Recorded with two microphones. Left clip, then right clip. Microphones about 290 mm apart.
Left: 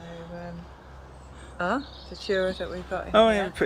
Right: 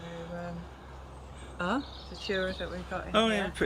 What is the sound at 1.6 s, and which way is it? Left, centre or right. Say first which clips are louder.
Speech: left 5 dB; centre.